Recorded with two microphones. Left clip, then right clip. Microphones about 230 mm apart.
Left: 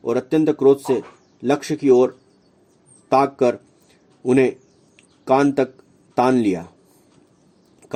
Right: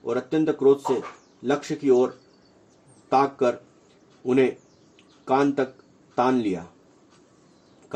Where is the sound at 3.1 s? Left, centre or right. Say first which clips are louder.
Left 4 dB; left.